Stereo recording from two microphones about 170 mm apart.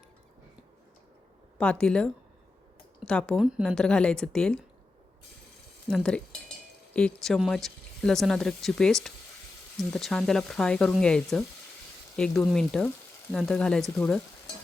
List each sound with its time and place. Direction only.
1.5 s speech: 5° left (ahead or behind)
5.9 s speech: 5° left (ahead or behind)